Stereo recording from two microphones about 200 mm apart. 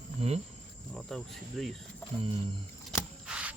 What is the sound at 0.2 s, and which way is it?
Cricket, 30° right (ahead or behind).